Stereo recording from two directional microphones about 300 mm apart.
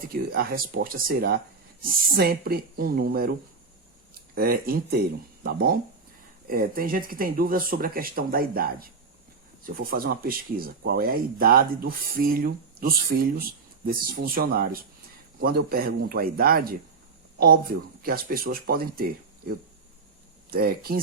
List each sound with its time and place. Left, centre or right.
0.1 s speech: right
20.5 s speech: right